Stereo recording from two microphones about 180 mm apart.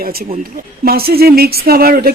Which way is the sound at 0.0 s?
60° right (ahead or behind).